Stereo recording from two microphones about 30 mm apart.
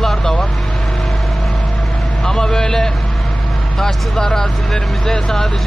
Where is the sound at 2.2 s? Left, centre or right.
Left.